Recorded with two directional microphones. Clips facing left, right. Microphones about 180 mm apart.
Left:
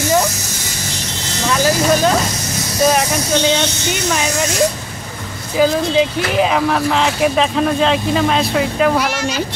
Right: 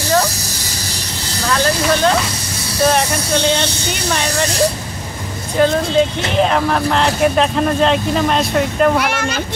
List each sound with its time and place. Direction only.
1.5 s a sound: 10° left (ahead or behind)
4.1 s speech: 5° left (ahead or behind)
5.6 s speech: 5° left (ahead or behind)